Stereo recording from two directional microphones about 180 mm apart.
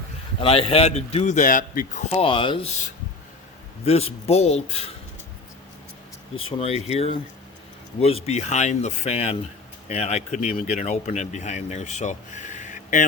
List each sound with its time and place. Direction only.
0.4 s speech: 35° left (ahead or behind); by 2.0 s 50° left (ahead or behind)
2.0 s speech: 30° left (ahead or behind)
6.3 s speech: 35° left (ahead or behind)